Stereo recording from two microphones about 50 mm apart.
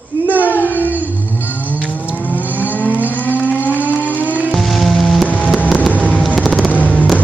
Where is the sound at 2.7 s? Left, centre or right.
Left.